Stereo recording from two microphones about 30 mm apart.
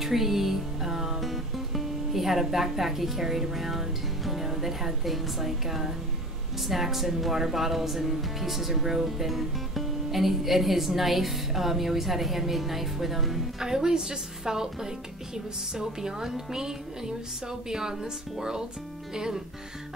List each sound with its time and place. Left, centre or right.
0.0 s music: centre
1.2 s speech: centre
13.6 s a woman's voice: centre